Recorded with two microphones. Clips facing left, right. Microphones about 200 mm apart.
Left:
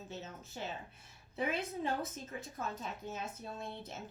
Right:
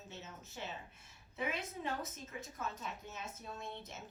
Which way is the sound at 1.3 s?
35° left (ahead or behind).